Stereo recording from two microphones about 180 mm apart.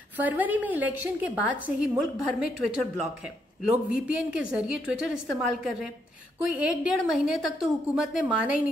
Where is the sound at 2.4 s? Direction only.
5° right (ahead or behind).